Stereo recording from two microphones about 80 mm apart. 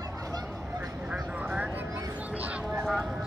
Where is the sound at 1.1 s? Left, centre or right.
Centre.